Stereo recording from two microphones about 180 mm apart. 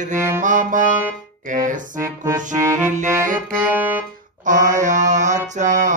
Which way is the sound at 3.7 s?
10° right (ahead or behind).